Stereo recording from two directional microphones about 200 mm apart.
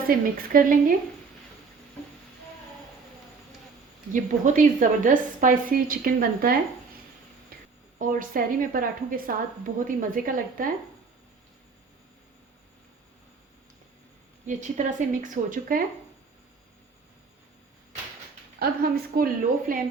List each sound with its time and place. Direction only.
0.1 s a woman's voice: 45° right (ahead or behind)
4.1 s a woman's voice: 40° right (ahead or behind)
7.9 s a woman's voice: 45° right (ahead or behind)
14.4 s speech: 40° right (ahead or behind)
18.6 s a woman's voice: 50° right (ahead or behind)